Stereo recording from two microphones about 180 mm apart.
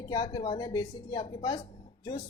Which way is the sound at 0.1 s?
20° left (ahead or behind).